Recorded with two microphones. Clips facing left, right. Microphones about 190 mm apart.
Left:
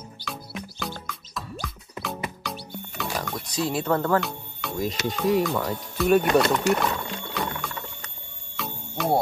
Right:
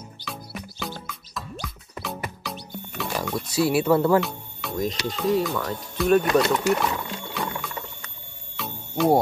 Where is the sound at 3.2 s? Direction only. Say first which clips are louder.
Right 8 dB; 10° right (ahead or behind).